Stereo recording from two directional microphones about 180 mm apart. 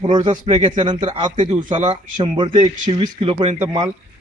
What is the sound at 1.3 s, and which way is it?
Speech, 40° right (ahead or behind).